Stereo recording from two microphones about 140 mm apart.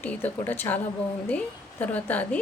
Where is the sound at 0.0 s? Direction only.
10° left (ahead or behind).